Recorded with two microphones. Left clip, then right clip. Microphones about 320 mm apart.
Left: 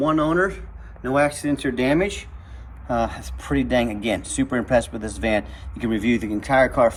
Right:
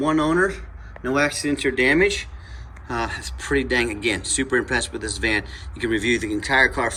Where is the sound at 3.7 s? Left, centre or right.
Centre.